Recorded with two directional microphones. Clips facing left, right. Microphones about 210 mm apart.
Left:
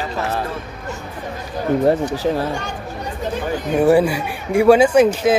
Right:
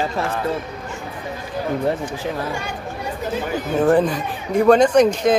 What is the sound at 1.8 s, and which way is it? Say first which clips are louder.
Speech: left 6 dB; 40° left (ahead or behind).